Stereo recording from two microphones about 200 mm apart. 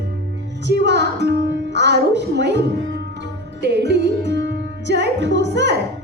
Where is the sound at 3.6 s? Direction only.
60° right (ahead or behind).